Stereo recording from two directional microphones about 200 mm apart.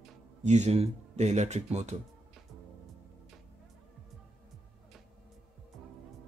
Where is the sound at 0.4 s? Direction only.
35° right (ahead or behind).